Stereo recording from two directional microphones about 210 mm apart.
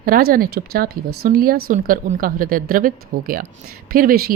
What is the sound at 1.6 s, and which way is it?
Speech, 40° right (ahead or behind).